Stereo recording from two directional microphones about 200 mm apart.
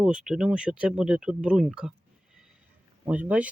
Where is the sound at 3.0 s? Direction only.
5° right (ahead or behind).